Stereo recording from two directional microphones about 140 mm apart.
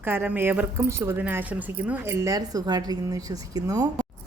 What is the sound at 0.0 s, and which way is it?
A woman's voice, 15° right (ahead or behind).